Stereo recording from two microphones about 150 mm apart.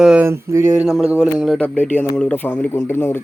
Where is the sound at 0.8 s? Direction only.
5° right (ahead or behind).